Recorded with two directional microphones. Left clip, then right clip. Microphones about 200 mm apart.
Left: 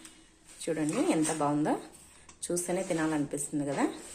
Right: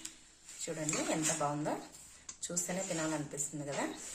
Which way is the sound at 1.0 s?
40° left (ahead or behind).